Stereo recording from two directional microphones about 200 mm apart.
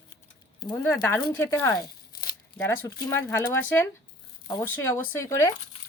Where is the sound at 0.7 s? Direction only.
10° left (ahead or behind).